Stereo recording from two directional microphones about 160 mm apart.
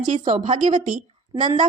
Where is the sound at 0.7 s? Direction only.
55° right (ahead or behind).